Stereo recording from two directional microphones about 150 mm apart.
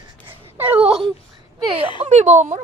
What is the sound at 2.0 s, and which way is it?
Speech, 50° right (ahead or behind).